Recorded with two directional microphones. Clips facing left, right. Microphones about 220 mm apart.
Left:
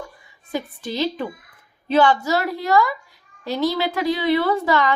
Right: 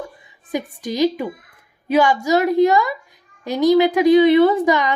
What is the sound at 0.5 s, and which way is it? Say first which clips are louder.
A woman's voice: right 3 dB; 15° right (ahead or behind).